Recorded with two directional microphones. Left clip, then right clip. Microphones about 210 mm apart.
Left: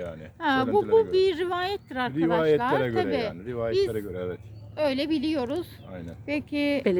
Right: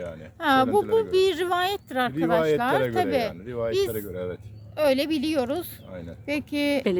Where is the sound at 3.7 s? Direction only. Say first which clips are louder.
Even; 55° right (ahead or behind).